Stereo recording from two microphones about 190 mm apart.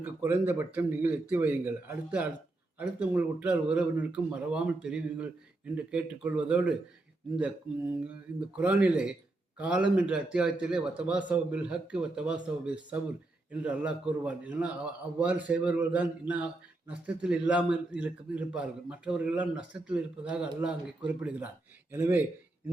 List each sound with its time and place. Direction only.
0.0 s a man's voice: 10° right (ahead or behind)
8.5 s a man's voice: 5° right (ahead or behind)